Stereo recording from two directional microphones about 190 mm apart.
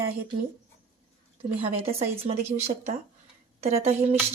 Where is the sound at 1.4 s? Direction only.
30° right (ahead or behind).